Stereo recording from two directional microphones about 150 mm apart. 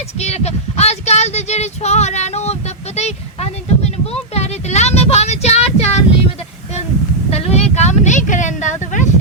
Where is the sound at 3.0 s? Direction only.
45° left (ahead or behind).